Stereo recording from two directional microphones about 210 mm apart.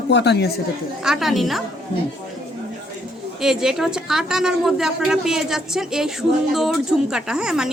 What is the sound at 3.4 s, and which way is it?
A woman's voice, centre (ahead or behind).